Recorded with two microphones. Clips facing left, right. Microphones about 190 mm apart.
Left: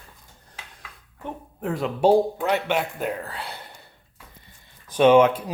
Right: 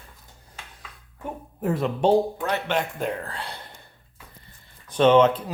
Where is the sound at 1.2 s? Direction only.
5° right (ahead or behind).